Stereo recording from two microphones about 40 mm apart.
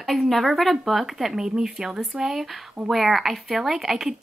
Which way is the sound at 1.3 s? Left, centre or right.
Centre.